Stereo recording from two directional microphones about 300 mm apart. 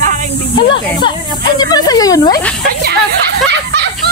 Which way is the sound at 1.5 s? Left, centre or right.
Centre.